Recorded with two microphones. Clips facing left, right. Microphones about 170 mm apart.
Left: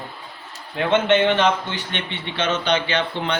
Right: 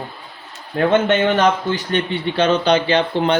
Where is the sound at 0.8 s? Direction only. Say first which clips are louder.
Right 2 dB; 45° right (ahead or behind).